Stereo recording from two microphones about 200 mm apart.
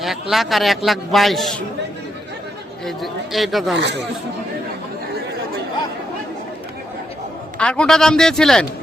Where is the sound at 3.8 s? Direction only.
60° right (ahead or behind).